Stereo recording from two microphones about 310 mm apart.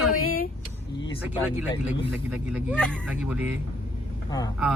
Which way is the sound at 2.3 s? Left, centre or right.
Centre.